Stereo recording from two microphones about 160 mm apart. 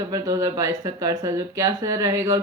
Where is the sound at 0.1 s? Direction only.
20° right (ahead or behind).